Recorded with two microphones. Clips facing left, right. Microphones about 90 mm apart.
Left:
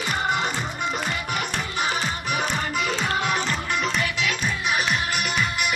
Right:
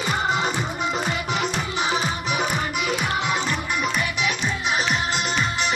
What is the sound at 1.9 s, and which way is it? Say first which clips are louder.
Music: right 2 dB; 15° right (ahead or behind).